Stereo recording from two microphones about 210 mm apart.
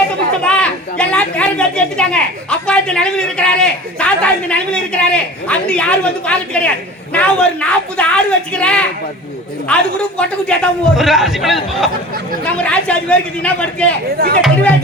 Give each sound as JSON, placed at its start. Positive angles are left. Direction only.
{"t": 0.4, "sound": "a woman's voice", "side_deg": 5}
{"t": 14.2, "sound": "speech", "side_deg": -45}